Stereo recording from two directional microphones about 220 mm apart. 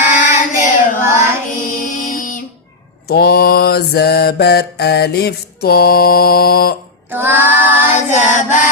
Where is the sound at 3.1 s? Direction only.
45° left (ahead or behind).